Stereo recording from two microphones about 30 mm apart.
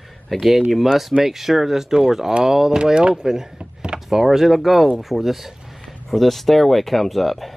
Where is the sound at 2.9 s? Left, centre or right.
Right; by 5.5 s centre.